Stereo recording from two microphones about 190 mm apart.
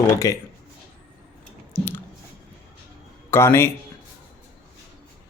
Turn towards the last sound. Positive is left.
turn(degrees=15)  # may be behind; listen again after turning